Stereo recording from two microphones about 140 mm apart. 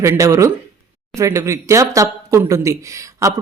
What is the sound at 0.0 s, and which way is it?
Speech, 20° right (ahead or behind).